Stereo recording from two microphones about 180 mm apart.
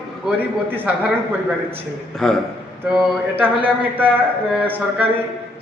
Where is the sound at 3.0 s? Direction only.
10° right (ahead or behind).